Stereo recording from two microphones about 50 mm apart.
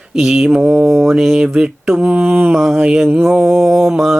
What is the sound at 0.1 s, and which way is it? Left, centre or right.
Mantra, centre.